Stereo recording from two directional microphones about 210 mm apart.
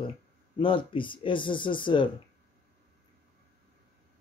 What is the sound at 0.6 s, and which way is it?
Speech, 25° left (ahead or behind).